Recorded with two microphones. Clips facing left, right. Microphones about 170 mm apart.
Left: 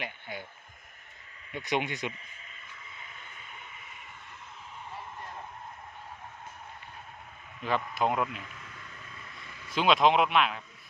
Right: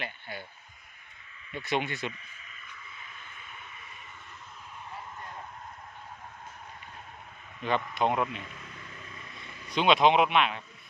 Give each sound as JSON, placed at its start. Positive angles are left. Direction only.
{"t": 0.0, "sound": "a sound", "side_deg": 20}
{"t": 1.5, "sound": "speech", "side_deg": 15}
{"t": 7.6, "sound": "a man's voice", "side_deg": 5}
{"t": 9.7, "sound": "a man's voice", "side_deg": 0}